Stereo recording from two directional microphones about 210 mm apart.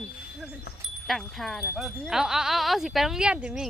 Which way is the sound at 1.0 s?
Centre (ahead or behind).